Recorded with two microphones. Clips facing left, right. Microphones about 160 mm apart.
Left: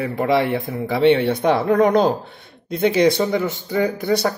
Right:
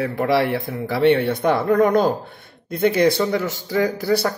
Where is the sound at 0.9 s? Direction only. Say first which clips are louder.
Left 1 dB; 55° right (ahead or behind).